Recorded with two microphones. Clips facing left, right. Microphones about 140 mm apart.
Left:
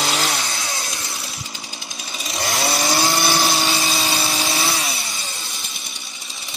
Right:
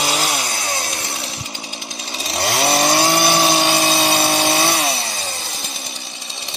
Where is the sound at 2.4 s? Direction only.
30° right (ahead or behind).